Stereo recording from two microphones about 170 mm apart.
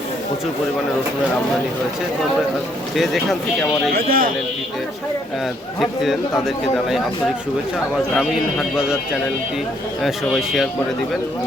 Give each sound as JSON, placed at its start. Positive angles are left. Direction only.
{"t": 2.9, "sound": "speech", "side_deg": 0}
{"t": 3.9, "sound": "speech", "side_deg": -60}
{"t": 5.8, "sound": "speech", "side_deg": 0}
{"t": 8.1, "sound": "speech", "side_deg": 0}
{"t": 10.0, "sound": "speech", "side_deg": 0}